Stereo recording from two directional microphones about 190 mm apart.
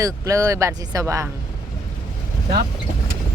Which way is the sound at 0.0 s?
15° right (ahead or behind).